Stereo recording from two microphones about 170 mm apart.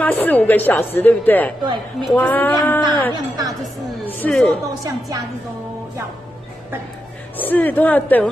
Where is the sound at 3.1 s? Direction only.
20° right (ahead or behind).